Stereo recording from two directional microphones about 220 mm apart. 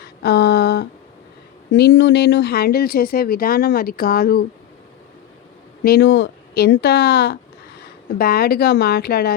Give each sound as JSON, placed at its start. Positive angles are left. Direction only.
{"t": 0.0, "sound": "a sound", "side_deg": 45}
{"t": 1.7, "sound": "speech", "side_deg": 55}
{"t": 5.8, "sound": "speech", "side_deg": 50}